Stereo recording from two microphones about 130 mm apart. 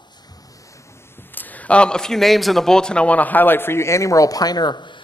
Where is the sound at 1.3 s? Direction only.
15° left (ahead or behind).